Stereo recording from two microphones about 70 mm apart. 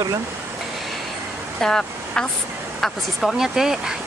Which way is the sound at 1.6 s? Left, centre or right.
Centre.